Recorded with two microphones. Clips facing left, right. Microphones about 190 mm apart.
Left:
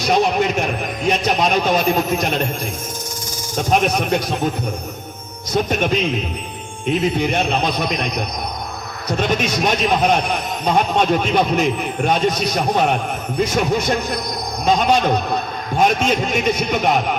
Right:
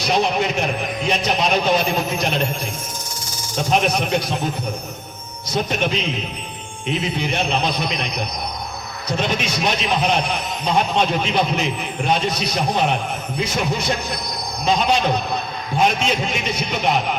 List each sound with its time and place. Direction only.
0.0 s speech: 50° left (ahead or behind)
3.6 s a man's voice: 50° left (ahead or behind)
5.5 s a man's voice: 50° left (ahead or behind)